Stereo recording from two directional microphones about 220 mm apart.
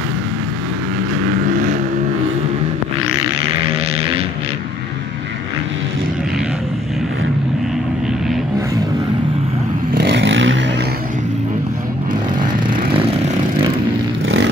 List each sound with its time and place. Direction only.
9.9 s vehicle: 50° right (ahead or behind)